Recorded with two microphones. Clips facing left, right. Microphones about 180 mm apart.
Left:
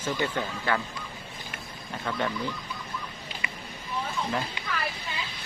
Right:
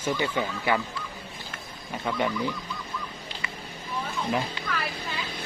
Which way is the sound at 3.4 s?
15° left (ahead or behind).